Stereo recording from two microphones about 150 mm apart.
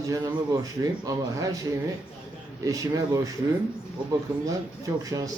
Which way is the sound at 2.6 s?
25° right (ahead or behind).